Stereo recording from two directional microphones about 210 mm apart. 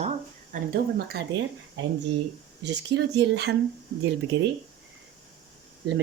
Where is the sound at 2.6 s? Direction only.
55° right (ahead or behind).